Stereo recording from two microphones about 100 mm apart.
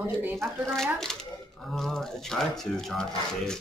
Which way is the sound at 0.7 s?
5° left (ahead or behind).